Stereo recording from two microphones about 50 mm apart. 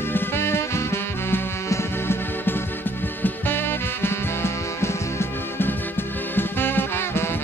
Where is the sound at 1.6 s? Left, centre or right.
Left.